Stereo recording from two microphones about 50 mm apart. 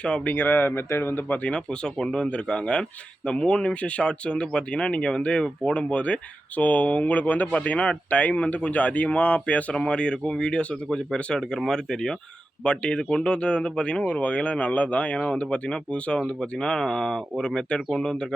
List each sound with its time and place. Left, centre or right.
0.3 s speech: left
1.3 s speech: left